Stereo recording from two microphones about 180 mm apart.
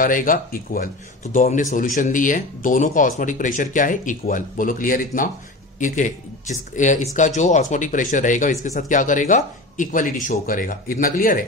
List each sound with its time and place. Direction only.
0.0 s speech: 50° left (ahead or behind)